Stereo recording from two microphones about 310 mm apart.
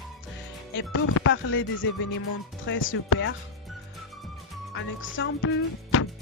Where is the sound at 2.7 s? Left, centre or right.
Left.